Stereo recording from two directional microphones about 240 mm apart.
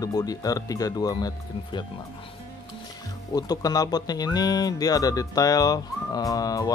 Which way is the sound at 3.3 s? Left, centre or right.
Centre.